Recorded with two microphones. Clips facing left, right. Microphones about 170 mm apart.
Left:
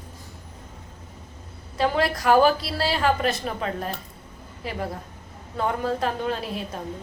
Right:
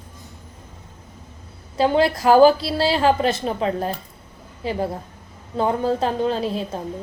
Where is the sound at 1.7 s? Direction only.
30° right (ahead or behind).